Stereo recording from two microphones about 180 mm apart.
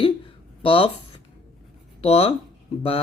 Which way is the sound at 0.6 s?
30° left (ahead or behind).